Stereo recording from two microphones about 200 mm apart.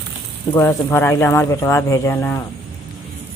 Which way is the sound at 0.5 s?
15° left (ahead or behind).